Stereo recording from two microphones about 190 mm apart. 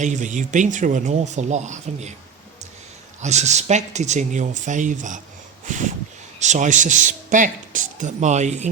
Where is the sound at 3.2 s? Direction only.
35° right (ahead or behind).